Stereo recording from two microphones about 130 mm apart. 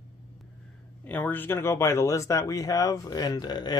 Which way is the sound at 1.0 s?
15° left (ahead or behind).